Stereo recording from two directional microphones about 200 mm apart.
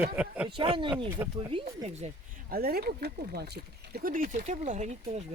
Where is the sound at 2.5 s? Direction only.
50° right (ahead or behind).